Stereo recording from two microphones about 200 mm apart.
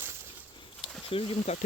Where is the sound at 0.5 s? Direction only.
25° left (ahead or behind).